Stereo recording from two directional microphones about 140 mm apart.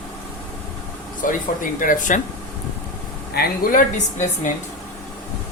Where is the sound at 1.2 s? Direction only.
70° left (ahead or behind).